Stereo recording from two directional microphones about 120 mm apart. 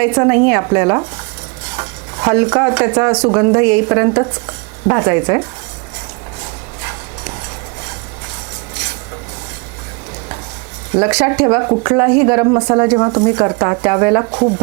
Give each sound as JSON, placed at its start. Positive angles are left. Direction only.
{"t": 0.0, "sound": "speech", "side_deg": -20}
{"t": 6.4, "sound": "a sound", "side_deg": -20}
{"t": 10.9, "sound": "speech", "side_deg": -25}